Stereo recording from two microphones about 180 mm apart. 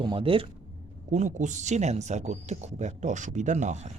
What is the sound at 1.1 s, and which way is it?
Speech, 45° right (ahead or behind).